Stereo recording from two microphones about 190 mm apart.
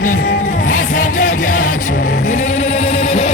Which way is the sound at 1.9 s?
50° left (ahead or behind).